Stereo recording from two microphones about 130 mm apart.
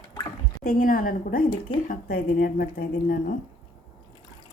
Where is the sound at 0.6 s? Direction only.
90° left.